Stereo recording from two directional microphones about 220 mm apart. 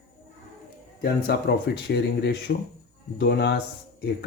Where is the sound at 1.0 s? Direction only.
45° left (ahead or behind).